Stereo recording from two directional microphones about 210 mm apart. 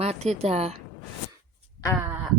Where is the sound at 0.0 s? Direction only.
30° right (ahead or behind).